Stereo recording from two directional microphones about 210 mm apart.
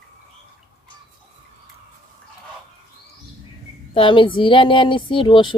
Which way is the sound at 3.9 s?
25° left (ahead or behind).